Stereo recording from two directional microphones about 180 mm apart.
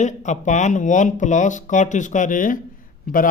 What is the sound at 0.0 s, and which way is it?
Speech, 40° left (ahead or behind).